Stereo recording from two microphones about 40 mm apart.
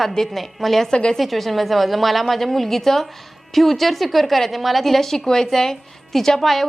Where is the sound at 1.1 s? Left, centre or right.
Centre.